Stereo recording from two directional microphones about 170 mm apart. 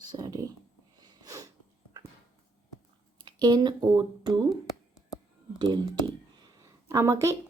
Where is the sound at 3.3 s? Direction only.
25° right (ahead or behind).